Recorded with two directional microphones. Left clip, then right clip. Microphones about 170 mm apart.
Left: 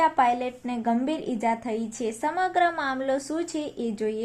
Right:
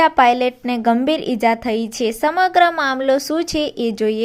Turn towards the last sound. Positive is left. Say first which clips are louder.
# right 10 dB
turn(degrees=-35)  # may be behind; listen again after turning